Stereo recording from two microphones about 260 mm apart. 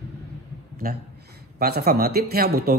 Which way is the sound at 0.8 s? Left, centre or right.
Right.